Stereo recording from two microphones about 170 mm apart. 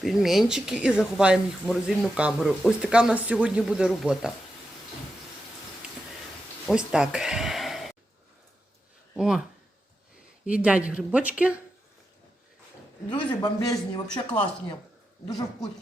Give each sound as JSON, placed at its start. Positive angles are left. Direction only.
{"t": 0.0, "sound": "speech", "side_deg": 0}
{"t": 6.7, "sound": "a sound", "side_deg": -5}
{"t": 9.1, "sound": "speech", "side_deg": -5}
{"t": 10.4, "sound": "speech", "side_deg": -5}
{"t": 13.1, "sound": "speech", "side_deg": 25}